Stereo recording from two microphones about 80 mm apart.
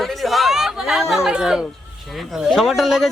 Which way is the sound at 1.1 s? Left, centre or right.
Centre.